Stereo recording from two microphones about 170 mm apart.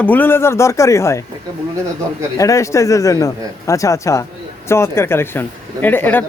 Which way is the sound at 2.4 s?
20° left (ahead or behind).